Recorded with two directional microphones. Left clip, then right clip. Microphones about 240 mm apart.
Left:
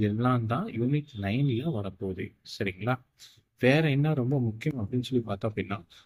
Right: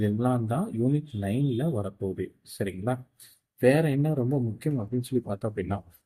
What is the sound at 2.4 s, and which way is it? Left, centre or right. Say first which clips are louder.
Speech: left 1 dB; centre.